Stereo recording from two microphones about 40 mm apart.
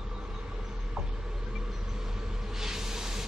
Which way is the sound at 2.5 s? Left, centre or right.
Centre.